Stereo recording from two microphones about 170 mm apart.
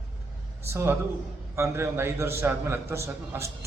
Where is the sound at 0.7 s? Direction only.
15° right (ahead or behind).